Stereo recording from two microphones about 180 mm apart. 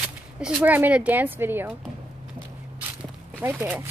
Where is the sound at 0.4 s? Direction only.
5° right (ahead or behind).